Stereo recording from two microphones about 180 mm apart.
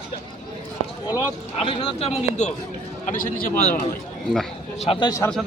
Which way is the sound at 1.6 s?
30° left (ahead or behind).